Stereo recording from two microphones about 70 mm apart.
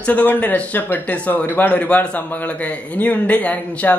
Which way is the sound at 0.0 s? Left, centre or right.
Left.